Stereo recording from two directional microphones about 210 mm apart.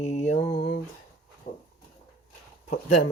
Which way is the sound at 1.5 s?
35° left (ahead or behind).